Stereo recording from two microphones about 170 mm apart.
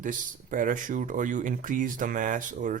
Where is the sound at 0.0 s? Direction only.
50° right (ahead or behind).